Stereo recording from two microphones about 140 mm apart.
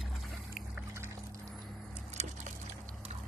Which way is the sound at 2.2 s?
55° right (ahead or behind).